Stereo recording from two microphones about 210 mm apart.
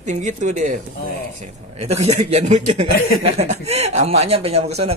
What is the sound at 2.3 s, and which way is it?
Speech, 35° right (ahead or behind).